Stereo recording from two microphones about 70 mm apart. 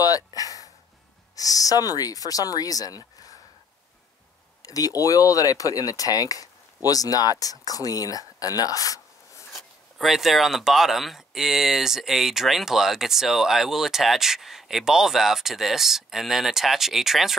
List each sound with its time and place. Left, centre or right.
0.0 s a sound: left
1.3 s speech: left
4.6 s speech: left
9.5 s speech: centre